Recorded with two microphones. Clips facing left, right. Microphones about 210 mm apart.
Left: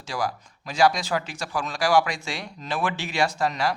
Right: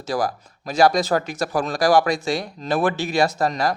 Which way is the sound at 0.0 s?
40° right (ahead or behind).